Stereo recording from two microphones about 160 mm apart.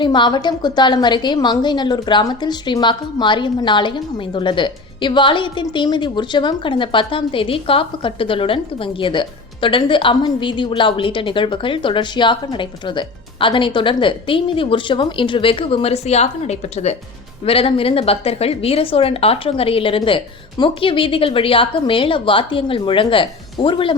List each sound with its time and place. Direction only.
0.0 s a woman's voice: 30° left (ahead or behind)